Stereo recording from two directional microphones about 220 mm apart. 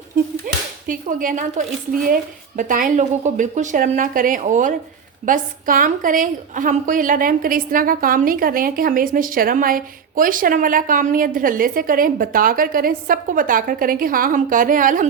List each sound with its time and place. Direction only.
0.4 s a woman's voice: 40° right (ahead or behind)